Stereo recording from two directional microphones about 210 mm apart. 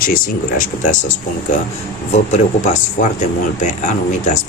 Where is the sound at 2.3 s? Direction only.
35° left (ahead or behind).